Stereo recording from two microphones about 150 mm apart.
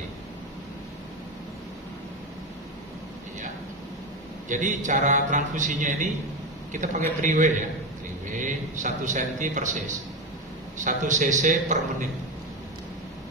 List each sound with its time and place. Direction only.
4.5 s a man's voice: 55° right (ahead or behind)
10.8 s a man's voice: 60° right (ahead or behind)